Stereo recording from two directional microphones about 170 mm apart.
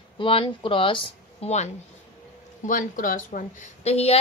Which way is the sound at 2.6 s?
50° left (ahead or behind).